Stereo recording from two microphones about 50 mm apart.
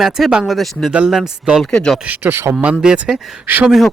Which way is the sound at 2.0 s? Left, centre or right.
Right.